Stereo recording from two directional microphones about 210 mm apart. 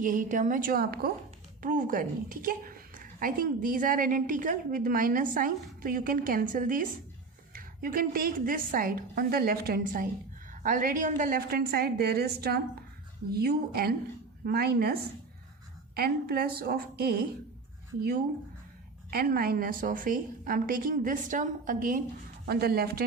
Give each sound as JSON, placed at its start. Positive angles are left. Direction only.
{"t": 0.0, "sound": "a woman's voice", "side_deg": -40}
{"t": 16.0, "sound": "a woman's voice", "side_deg": -45}
{"t": 19.1, "sound": "a woman's voice", "side_deg": -45}